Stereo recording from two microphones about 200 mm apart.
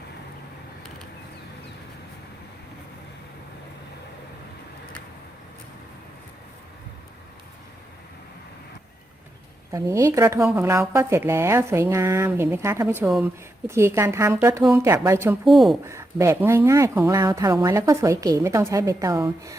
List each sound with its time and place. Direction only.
9.7 s speech: 15° right (ahead or behind)
15.4 s speech: centre (ahead or behind)
15.9 s speech: 15° right (ahead or behind)